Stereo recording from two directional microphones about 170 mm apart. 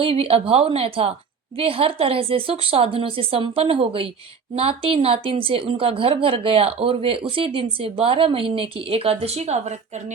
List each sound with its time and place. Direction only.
0.0 s a woman's voice: 35° right (ahead or behind)